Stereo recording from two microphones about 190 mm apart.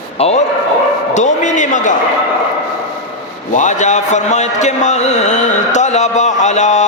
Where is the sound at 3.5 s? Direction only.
40° left (ahead or behind).